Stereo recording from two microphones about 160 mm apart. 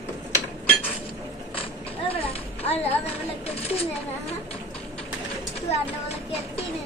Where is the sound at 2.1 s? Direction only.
40° left (ahead or behind).